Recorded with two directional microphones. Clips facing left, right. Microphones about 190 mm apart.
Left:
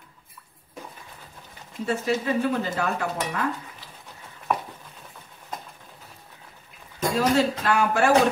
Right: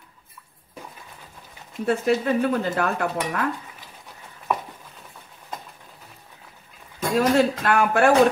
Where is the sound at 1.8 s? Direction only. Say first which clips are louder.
Right 4 dB; 55° right (ahead or behind).